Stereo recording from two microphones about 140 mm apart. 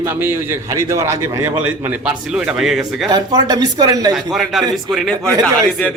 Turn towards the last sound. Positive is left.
turn(degrees=10)  # may be behind; listen again after turning